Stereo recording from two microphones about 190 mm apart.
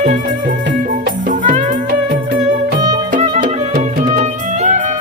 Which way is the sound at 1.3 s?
45° right (ahead or behind).